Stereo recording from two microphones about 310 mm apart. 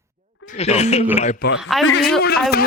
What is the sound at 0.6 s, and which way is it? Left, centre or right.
Speech, left.